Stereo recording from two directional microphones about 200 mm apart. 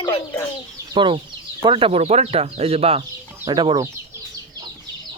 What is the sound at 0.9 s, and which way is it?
Speech, 25° right (ahead or behind).